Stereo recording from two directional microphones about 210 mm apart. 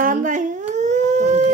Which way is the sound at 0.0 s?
40° right (ahead or behind).